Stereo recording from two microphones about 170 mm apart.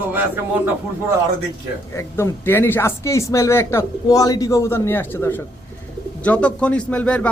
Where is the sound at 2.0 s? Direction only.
15° left (ahead or behind).